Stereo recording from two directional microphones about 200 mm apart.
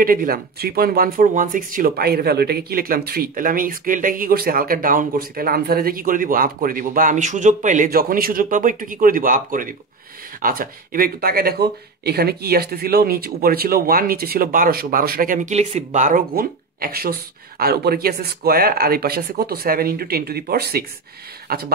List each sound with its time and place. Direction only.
0.0 s speech: 45° right (ahead or behind)